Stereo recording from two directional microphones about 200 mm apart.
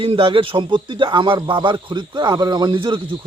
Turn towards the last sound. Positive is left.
turn(degrees=-25)  # may be behind; listen again after turning